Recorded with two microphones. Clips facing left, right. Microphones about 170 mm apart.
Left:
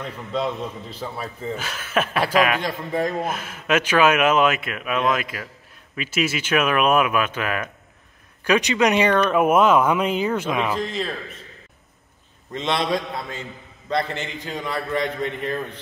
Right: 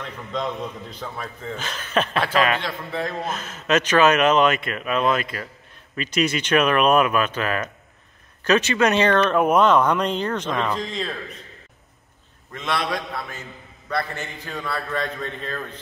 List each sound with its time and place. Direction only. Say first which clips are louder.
0.0 s a man's voice: left 2 dB; 5° left (ahead or behind)
2.6 s a man's voice: left 4 dB; 40° left (ahead or behind)
3.1 s a man's voice: left 3 dB; 10° left (ahead or behind)
12.5 s a man's voice: left 3 dB; 25° left (ahead or behind)